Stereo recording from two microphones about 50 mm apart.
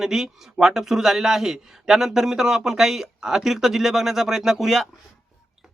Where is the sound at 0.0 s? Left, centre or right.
Centre.